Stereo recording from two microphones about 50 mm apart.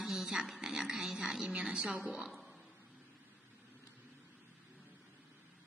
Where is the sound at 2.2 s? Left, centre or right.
Centre.